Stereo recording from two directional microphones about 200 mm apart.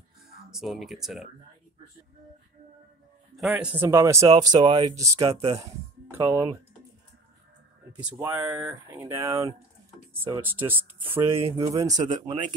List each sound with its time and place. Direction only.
0.5 s speech: centre (ahead or behind)
3.3 s speech: 5° right (ahead or behind)
8.2 s speech: 15° right (ahead or behind)
11.3 s speech: 25° right (ahead or behind)